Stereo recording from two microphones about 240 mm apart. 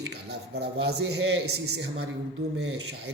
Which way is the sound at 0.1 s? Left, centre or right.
Right.